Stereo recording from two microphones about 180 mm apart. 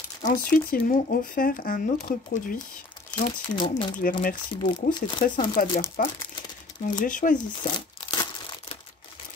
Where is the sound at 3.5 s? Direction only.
25° left (ahead or behind).